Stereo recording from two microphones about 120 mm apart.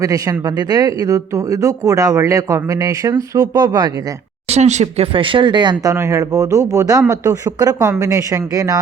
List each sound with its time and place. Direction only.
0.0 s speech: 30° right (ahead or behind)
4.4 s speech: 65° right (ahead or behind)
5.1 s speech: 45° right (ahead or behind)
5.9 s speech: 25° right (ahead or behind)